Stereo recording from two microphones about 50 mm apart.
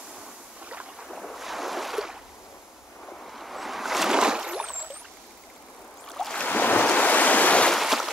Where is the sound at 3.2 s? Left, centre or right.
Centre.